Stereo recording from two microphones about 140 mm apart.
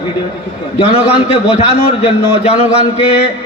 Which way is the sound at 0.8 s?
45° left (ahead or behind).